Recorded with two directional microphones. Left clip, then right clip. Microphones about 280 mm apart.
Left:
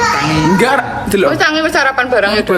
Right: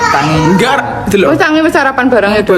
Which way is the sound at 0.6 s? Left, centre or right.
Centre.